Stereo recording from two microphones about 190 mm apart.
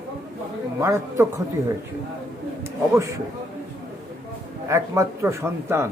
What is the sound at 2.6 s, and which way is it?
Speech, 15° right (ahead or behind).